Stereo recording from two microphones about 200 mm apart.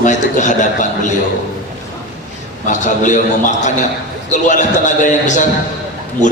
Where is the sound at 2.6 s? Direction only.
40° left (ahead or behind).